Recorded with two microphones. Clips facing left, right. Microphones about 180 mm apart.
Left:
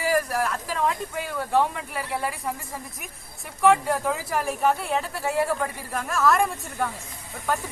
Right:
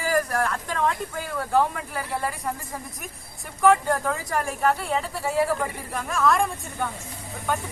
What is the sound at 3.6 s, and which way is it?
Speech, centre (ahead or behind).